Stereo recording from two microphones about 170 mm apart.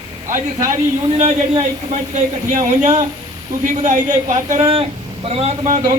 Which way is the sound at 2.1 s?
45° right (ahead or behind).